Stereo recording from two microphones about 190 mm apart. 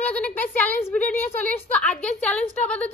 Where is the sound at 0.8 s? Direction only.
10° left (ahead or behind).